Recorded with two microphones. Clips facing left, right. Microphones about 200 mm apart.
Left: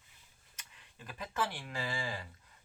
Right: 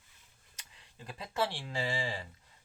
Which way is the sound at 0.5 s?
30° right (ahead or behind).